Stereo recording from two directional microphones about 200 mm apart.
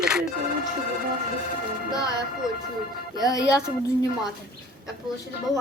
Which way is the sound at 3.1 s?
20° left (ahead or behind).